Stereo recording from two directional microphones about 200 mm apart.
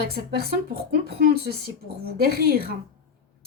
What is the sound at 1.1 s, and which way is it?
Speech, 55° right (ahead or behind).